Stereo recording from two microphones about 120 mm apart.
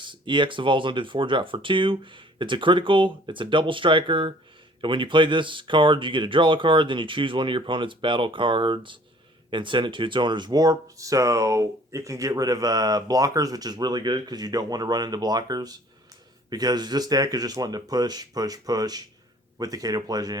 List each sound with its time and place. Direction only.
0.0 s speech: 40° right (ahead or behind)